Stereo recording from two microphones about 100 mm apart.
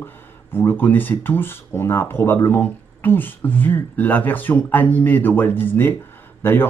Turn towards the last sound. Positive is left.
turn(degrees=20)  # may be behind; listen again after turning